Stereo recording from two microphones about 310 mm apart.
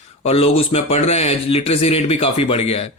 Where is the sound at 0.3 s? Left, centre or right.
Centre.